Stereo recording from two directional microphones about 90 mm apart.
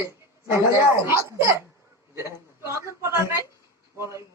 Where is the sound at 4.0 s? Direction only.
35° right (ahead or behind).